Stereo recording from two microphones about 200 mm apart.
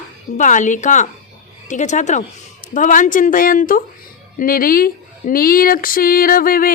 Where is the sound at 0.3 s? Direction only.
40° left (ahead or behind).